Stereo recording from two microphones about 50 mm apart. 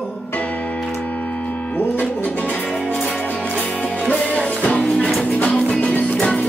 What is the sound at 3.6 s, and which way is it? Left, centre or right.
Music, left.